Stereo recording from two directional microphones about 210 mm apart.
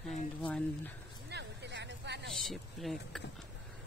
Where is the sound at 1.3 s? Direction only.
55° right (ahead or behind).